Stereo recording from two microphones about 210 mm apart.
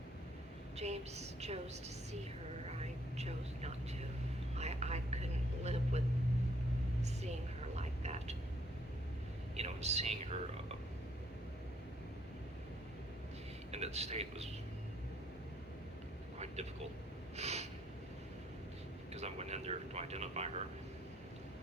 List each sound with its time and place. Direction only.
0.8 s a woman's voice: 30° right (ahead or behind)
2.6 s a sound: 30° right (ahead or behind)
5.6 s vehicle: 30° right (ahead or behind)
7.0 s a sound: 30° right (ahead or behind)
7.8 s vehicle: 30° right (ahead or behind)
9.6 s speech: 30° right (ahead or behind)
13.7 s a man's voice: 30° right (ahead or behind)
17.3 s snort: 30° right (ahead or behind)
19.1 s vehicle: 30° right (ahead or behind)